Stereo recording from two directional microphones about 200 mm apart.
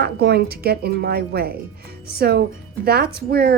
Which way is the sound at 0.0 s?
55° right (ahead or behind).